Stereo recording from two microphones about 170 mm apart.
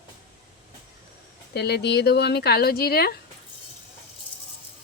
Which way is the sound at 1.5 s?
75° left (ahead or behind).